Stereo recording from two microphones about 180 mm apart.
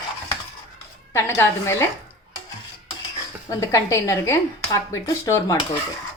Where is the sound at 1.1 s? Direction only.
15° left (ahead or behind).